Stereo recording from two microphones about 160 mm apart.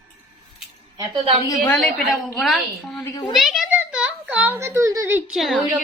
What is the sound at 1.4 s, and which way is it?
Speech, 25° left (ahead or behind).